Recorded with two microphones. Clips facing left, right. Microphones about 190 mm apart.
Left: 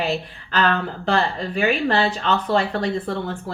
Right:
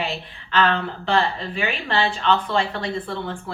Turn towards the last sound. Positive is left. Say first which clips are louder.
# left 3 dB
turn(degrees=40)  # may be behind; listen again after turning